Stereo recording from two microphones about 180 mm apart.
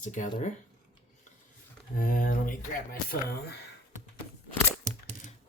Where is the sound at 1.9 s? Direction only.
50° left (ahead or behind).